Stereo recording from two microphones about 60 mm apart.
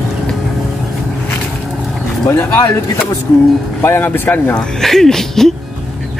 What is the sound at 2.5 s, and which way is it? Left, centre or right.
Speech, left.